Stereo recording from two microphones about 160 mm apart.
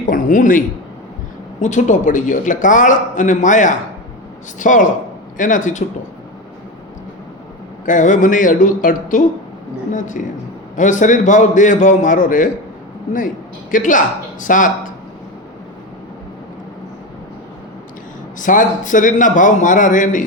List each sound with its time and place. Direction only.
0.0 s a sound: 55° left (ahead or behind)
1.6 s a man's voice: 50° left (ahead or behind)
7.9 s a man's voice: 50° left (ahead or behind)
18.3 s a man's voice: 55° left (ahead or behind)